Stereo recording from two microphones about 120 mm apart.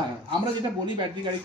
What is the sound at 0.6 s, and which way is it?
Speech, 40° right (ahead or behind).